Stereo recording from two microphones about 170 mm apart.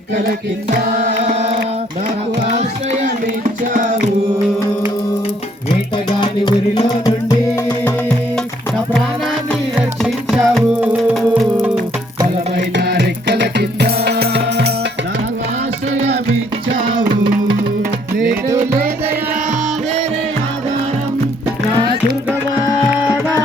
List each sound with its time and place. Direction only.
1.1 s music: 40° right (ahead or behind)
6.1 s music: 25° left (ahead or behind)
10.0 s music: centre (ahead or behind)
12.7 s music: 80° right